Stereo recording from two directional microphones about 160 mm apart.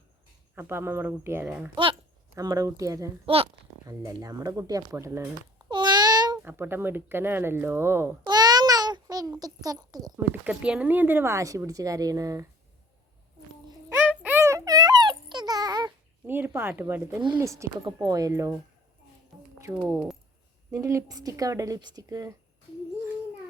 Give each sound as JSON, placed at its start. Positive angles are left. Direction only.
{"t": 0.5, "sound": "speech", "side_deg": -15}
{"t": 1.7, "sound": "speech", "side_deg": -30}
{"t": 2.3, "sound": "speech", "side_deg": -20}
{"t": 3.2, "sound": "speech", "side_deg": -35}
{"t": 3.8, "sound": "speech", "side_deg": -20}
{"t": 5.6, "sound": "a sound", "side_deg": -30}
{"t": 6.4, "sound": "speech", "side_deg": -15}
{"t": 8.2, "sound": "a sound", "side_deg": -25}
{"t": 10.4, "sound": "speech", "side_deg": -5}
{"t": 13.9, "sound": "a sound", "side_deg": -10}
{"t": 16.2, "sound": "speech", "side_deg": -15}
{"t": 19.3, "sound": "a sound", "side_deg": 0}
{"t": 19.7, "sound": "speech", "side_deg": -10}